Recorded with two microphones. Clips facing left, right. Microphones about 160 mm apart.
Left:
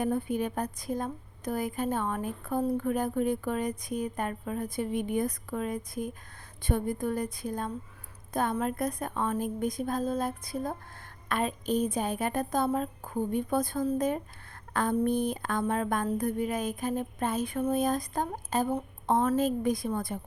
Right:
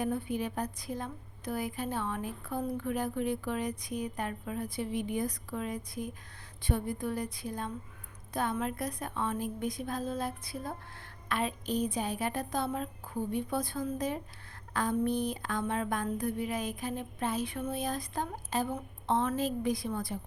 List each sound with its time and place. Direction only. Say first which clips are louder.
0.0 s a woman's voice: left 4 dB; 50° left (ahead or behind)